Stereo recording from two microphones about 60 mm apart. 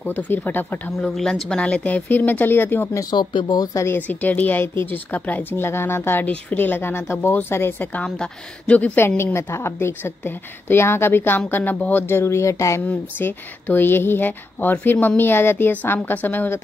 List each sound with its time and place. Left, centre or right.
0.1 s speech: left
1.0 s speech: centre
2.0 s speech: left
4.1 s speech: left
6.2 s speech: left
7.9 s speech: centre
8.9 s speech: left
12.1 s speech: left
12.8 s speech: left